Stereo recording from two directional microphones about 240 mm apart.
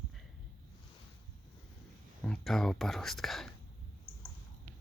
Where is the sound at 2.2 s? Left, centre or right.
Centre.